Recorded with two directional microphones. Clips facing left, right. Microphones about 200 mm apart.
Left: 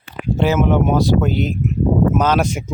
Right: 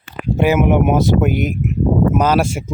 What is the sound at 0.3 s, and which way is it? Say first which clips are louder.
Speech: right 2 dB; 15° right (ahead or behind).